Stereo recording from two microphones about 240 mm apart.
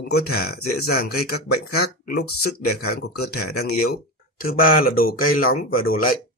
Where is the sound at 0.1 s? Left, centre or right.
Left.